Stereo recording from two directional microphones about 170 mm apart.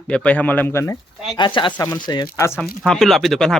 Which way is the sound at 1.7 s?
15° left (ahead or behind).